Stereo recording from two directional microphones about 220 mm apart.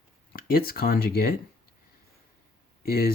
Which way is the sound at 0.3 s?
40° left (ahead or behind).